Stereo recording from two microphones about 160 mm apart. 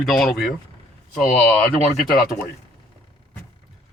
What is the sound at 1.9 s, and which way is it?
Speech, 65° left (ahead or behind).